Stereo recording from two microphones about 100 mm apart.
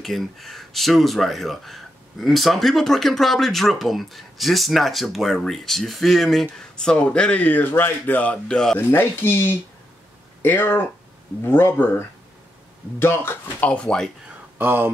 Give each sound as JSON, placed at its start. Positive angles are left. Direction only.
{"t": 0.0, "sound": "speech", "side_deg": 0}
{"t": 8.7, "sound": "speech", "side_deg": 25}
{"t": 13.0, "sound": "speech", "side_deg": 25}
{"t": 14.6, "sound": "speech", "side_deg": -20}